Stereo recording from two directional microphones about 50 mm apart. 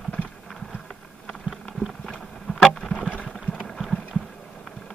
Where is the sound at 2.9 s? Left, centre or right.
Left.